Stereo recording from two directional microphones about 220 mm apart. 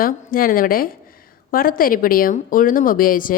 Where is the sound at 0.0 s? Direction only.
40° left (ahead or behind).